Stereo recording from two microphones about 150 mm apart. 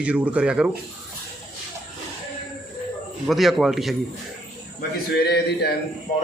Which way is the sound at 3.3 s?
Centre (ahead or behind).